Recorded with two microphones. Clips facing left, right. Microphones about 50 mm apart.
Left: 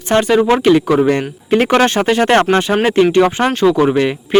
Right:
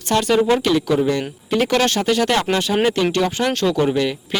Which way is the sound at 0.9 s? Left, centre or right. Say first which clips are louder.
Left 5 dB; left.